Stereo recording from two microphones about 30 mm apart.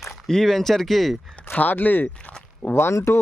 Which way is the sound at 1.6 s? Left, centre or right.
Left.